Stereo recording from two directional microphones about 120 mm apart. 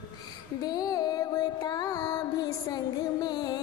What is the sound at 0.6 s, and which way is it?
Music, 35° left (ahead or behind).